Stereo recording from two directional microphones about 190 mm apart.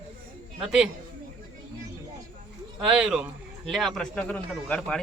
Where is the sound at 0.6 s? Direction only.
5° right (ahead or behind).